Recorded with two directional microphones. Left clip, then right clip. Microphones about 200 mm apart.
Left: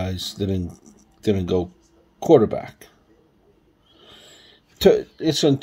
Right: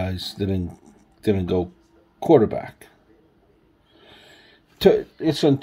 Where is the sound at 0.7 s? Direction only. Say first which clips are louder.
Even; 65° left (ahead or behind).